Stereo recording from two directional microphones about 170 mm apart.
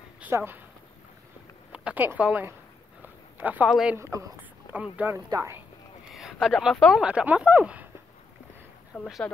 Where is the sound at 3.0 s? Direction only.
10° right (ahead or behind).